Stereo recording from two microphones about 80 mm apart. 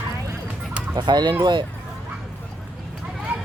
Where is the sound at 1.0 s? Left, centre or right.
Right.